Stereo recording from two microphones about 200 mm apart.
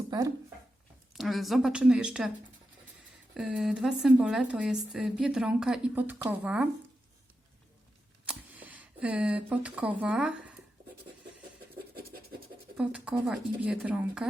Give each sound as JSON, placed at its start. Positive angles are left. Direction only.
{"t": 0.1, "sound": "speech", "side_deg": -15}
{"t": 1.1, "sound": "a woman's voice", "side_deg": 0}
{"t": 3.3, "sound": "a woman's voice", "side_deg": -5}
{"t": 8.3, "sound": "speech", "side_deg": -5}
{"t": 12.7, "sound": "a woman's voice", "side_deg": -5}